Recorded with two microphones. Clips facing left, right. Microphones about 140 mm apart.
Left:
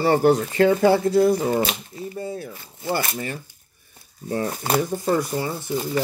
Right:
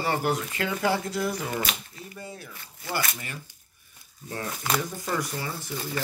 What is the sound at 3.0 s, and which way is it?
Speech, 40° left (ahead or behind).